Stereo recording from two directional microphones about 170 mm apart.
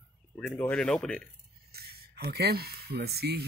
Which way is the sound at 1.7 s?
65° right (ahead or behind).